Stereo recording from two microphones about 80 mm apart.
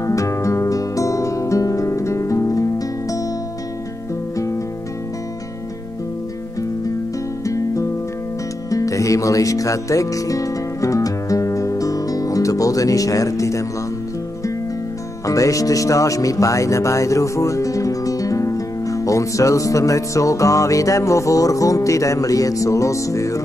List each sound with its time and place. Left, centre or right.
0.0 s music: left
7.4 s music: left
15.2 s speech: left